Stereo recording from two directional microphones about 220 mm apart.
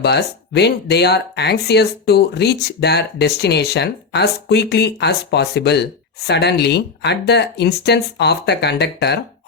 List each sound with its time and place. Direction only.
0.0 s speech: 50° left (ahead or behind)